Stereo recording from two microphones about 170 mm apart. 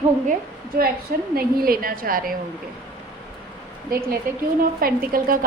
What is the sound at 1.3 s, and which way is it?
A woman's voice, 60° right (ahead or behind).